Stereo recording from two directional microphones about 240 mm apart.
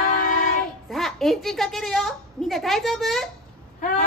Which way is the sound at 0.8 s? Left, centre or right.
Centre.